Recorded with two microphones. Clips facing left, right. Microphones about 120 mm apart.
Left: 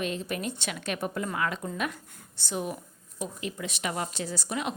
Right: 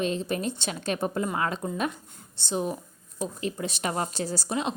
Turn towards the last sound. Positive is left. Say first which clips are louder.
# right 3 dB
turn(degrees=-30)  # may be behind; listen again after turning